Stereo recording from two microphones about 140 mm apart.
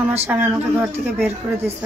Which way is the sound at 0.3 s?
15° right (ahead or behind).